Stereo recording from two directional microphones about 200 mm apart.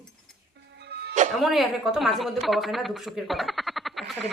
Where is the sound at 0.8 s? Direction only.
55° right (ahead or behind).